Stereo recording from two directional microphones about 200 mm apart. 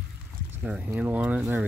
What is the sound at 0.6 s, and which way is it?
Speech, 5° right (ahead or behind).